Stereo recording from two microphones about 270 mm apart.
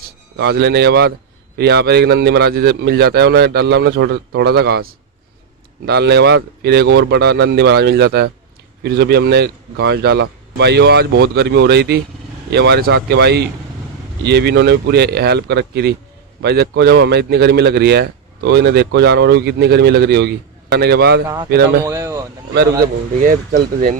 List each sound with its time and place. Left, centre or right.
0.3 s speech: right
21.8 s a sound: centre
22.5 s speech: right